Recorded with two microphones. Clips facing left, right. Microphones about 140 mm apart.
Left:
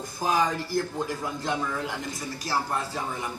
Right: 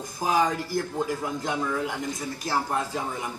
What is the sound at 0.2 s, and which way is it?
A man's voice, 15° right (ahead or behind).